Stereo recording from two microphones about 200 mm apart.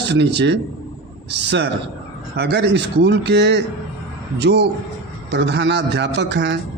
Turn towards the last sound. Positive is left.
turn(degrees=-60)  # may be behind; listen again after turning